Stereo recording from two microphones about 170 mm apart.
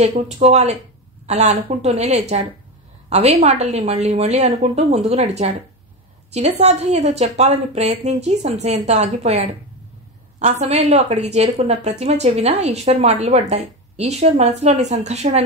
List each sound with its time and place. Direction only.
0.0 s speech: 40° right (ahead or behind)
6.6 s speech: 40° right (ahead or behind)